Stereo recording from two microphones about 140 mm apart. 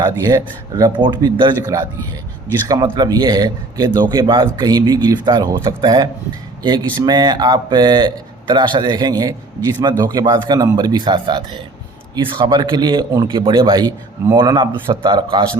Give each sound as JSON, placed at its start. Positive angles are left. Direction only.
{"t": 0.3, "sound": "a man's voice", "side_deg": -30}